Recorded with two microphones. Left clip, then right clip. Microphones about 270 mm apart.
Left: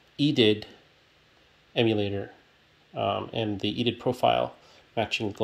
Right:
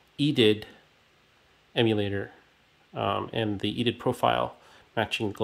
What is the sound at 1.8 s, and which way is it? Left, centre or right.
Speech, centre.